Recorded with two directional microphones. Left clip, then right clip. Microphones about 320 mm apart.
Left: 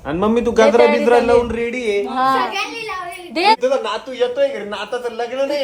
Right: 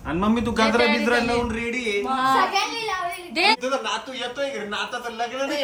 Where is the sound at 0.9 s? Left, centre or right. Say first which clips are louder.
Left 9 dB; centre.